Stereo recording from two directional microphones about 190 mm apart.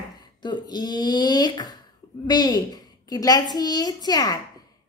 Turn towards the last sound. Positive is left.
turn(degrees=20)  # may be behind; listen again after turning